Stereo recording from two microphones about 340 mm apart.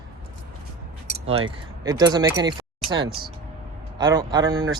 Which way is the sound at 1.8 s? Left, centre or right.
Centre.